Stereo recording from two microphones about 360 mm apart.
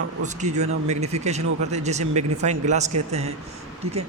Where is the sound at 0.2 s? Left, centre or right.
Centre.